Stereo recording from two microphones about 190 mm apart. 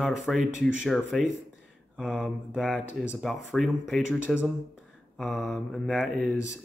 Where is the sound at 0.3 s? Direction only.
Centre (ahead or behind).